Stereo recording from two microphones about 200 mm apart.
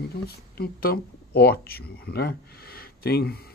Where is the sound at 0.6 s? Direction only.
50° left (ahead or behind).